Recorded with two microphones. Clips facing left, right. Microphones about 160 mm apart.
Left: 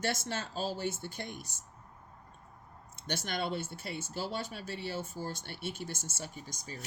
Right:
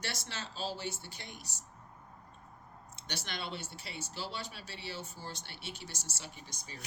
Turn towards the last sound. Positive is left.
turn(degrees=45)  # may be behind; listen again after turning